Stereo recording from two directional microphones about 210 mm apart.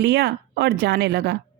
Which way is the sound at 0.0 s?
50° right (ahead or behind).